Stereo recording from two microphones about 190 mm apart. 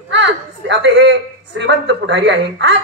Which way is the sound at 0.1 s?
70° right (ahead or behind).